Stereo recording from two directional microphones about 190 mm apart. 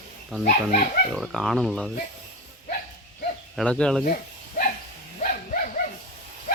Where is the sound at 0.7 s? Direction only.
40° left (ahead or behind).